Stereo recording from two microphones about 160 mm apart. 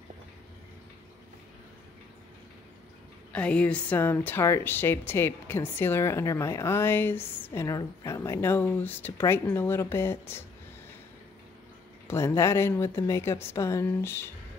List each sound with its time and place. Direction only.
3.3 s a woman's voice: 5° left (ahead or behind)
12.1 s a woman's voice: 15° left (ahead or behind)